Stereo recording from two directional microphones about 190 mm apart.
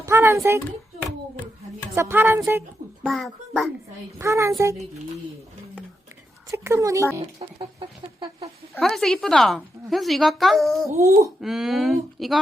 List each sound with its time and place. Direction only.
0.0 s a sound: 15° right (ahead or behind)
2.0 s speech: 15° right (ahead or behind)
3.0 s a child's voice: centre (ahead or behind)
4.2 s speech: 15° right (ahead or behind)
6.5 s speech: 15° right (ahead or behind)
7.3 s chicken: 25° right (ahead or behind)
8.7 s a woman's voice: centre (ahead or behind)
10.8 s speech: 15° right (ahead or behind)
11.3 s a woman's voice: centre (ahead or behind)